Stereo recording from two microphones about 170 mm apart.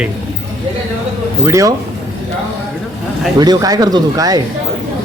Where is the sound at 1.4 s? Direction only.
20° right (ahead or behind).